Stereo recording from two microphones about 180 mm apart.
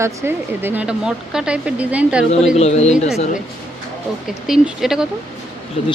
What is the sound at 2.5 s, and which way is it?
Speech, 35° left (ahead or behind).